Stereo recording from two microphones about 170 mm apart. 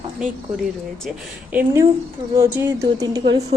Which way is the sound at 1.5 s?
15° right (ahead or behind).